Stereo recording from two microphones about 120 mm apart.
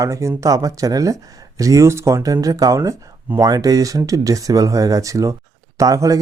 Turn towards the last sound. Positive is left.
turn(degrees=-30)  # may be behind; listen again after turning